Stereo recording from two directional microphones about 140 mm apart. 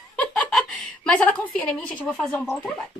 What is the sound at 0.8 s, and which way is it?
A woman's voice, 10° left (ahead or behind).